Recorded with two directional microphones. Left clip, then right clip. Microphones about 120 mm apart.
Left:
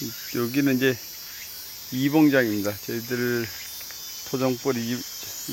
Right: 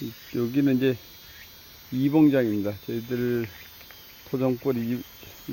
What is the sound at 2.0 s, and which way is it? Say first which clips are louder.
Speech: left 1 dB; 20° right (ahead or behind).